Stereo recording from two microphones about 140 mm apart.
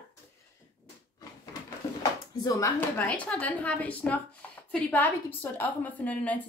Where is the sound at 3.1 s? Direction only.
10° left (ahead or behind).